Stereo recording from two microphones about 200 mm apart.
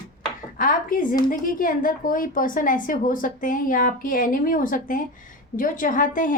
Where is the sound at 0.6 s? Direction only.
45° left (ahead or behind).